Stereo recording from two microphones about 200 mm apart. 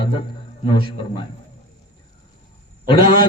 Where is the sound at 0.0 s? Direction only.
25° left (ahead or behind).